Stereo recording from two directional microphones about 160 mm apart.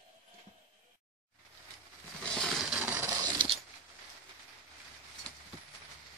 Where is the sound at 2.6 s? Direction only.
5° right (ahead or behind).